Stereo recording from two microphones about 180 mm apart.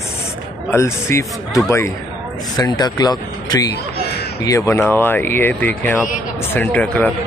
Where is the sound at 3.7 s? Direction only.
60° left (ahead or behind).